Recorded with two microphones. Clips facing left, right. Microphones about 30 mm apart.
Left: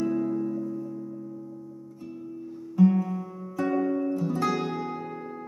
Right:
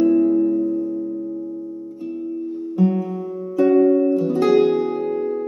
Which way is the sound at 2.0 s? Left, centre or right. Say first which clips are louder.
Right 12 dB; right.